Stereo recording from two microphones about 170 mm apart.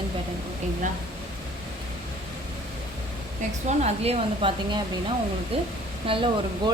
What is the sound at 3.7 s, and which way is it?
Speech, 40° right (ahead or behind).